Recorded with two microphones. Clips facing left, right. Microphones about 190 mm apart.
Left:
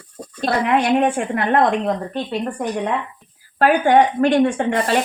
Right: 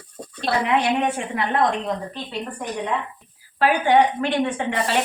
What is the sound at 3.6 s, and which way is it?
Speech, 50° left (ahead or behind).